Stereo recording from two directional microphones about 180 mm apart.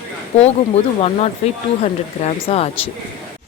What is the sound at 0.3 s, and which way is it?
A woman's voice, 35° left (ahead or behind).